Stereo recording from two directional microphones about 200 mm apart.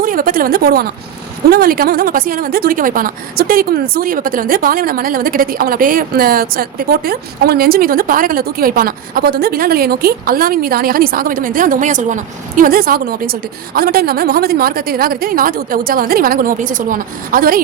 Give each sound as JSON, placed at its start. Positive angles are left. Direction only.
{"t": 0.0, "sound": "a woman's voice", "side_deg": -45}